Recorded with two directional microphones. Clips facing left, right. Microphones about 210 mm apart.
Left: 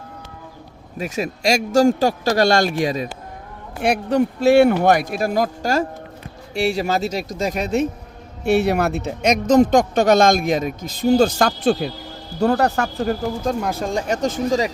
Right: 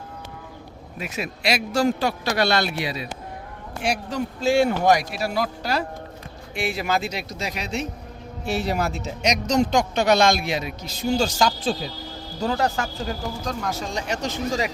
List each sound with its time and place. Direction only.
0.9 s speech: 40° left (ahead or behind)
3.8 s speech: 60° left (ahead or behind)
8.4 s speech: 65° left (ahead or behind)